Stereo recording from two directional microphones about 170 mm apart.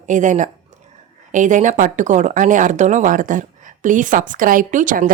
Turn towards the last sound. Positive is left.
turn(degrees=-50)  # may be behind; listen again after turning